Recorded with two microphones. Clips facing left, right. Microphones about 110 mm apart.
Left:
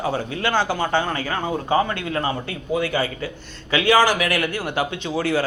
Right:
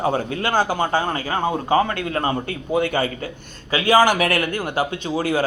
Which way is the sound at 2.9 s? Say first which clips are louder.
Right 1 dB; 50° right (ahead or behind).